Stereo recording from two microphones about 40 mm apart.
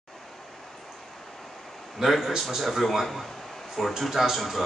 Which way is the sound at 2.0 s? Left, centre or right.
Centre.